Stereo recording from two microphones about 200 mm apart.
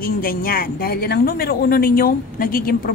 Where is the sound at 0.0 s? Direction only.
45° left (ahead or behind).